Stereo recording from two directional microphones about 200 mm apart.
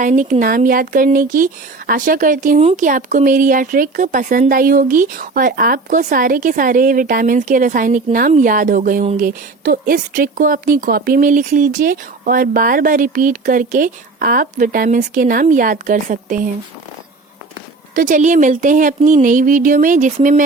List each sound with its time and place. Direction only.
0.0 s speech: 40° right (ahead or behind)
17.9 s speech: 40° right (ahead or behind)